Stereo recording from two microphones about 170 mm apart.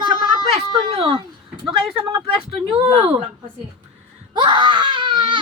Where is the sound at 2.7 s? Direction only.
35° right (ahead or behind).